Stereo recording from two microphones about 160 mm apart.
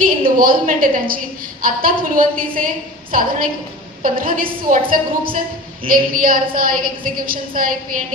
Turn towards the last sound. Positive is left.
turn(degrees=-60)  # may be behind; listen again after turning